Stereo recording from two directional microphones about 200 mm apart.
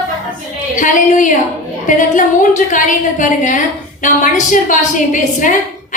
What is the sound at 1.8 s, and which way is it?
A woman's voice, 40° left (ahead or behind).